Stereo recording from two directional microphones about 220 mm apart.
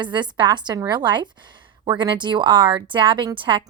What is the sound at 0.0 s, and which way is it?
A woman's voice, 20° right (ahead or behind).